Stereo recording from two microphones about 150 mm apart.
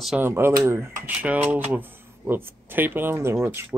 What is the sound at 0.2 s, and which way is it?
Speech, 15° right (ahead or behind).